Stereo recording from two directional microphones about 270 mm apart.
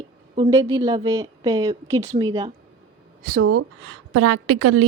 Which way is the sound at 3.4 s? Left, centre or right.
Right.